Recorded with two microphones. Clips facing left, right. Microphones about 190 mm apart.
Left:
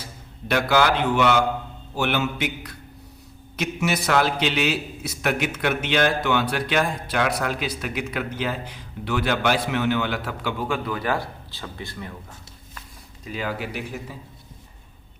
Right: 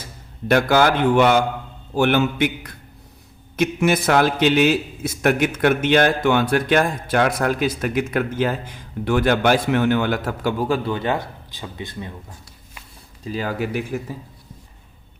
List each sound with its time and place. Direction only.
0.4 s a man's voice: 45° right (ahead or behind)
10.8 s speech: 25° right (ahead or behind)
13.2 s a man's voice: 40° right (ahead or behind)